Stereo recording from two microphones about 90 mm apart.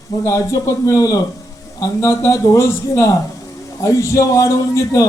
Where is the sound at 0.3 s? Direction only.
35° left (ahead or behind).